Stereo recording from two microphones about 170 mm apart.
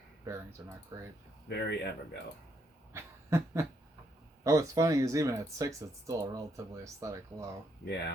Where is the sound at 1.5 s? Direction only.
75° left (ahead or behind).